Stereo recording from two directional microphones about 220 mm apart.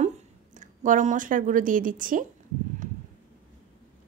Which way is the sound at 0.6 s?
35° right (ahead or behind).